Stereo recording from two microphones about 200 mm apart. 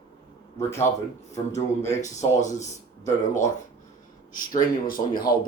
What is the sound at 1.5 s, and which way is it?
Speech, 15° left (ahead or behind).